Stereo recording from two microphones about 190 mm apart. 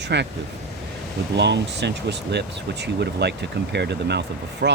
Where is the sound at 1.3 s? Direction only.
65° right (ahead or behind).